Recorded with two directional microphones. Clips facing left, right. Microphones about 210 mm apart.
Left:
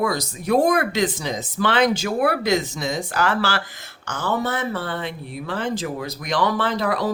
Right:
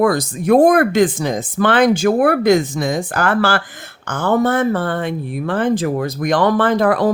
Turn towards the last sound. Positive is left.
turn(degrees=-50)  # may be behind; listen again after turning